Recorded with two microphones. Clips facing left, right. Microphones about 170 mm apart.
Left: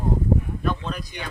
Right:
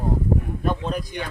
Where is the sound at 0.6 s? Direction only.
45° right (ahead or behind).